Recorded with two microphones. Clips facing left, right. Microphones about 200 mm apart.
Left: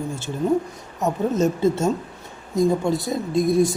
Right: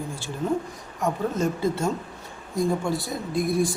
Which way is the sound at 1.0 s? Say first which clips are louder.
Left 4 dB; 25° left (ahead or behind).